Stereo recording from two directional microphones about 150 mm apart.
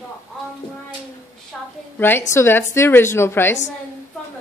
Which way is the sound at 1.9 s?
15° left (ahead or behind).